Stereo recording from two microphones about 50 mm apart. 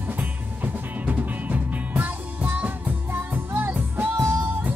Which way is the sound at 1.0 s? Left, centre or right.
Right.